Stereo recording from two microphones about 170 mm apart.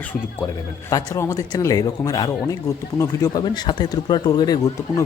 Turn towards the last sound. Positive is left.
turn(degrees=20)  # may be behind; listen again after turning